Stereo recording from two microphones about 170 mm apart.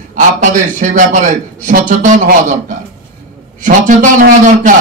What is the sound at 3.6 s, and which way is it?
A man's voice, 50° right (ahead or behind).